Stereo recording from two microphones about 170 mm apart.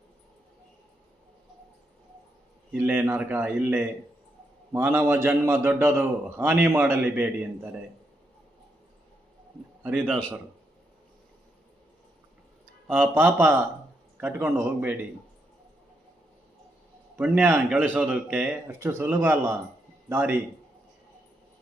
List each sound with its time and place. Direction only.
2.7 s a man's voice: 10° right (ahead or behind)
9.8 s a man's voice: 10° right (ahead or behind)
12.9 s a man's voice: 10° right (ahead or behind)
17.2 s a man's voice: 10° right (ahead or behind)